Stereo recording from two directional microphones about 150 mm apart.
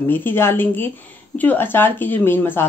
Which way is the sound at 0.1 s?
15° left (ahead or behind).